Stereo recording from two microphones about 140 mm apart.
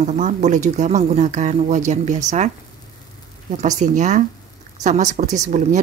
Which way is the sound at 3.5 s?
60° right (ahead or behind).